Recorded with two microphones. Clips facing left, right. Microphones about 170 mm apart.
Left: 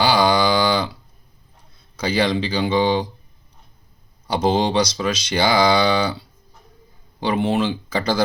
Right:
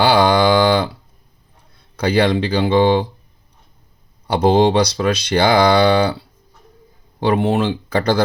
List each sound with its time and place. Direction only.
0.0 s a sound: 55° right (ahead or behind)
2.0 s speech: 60° right (ahead or behind)
4.3 s speech: 60° right (ahead or behind)
7.2 s speech: 60° right (ahead or behind)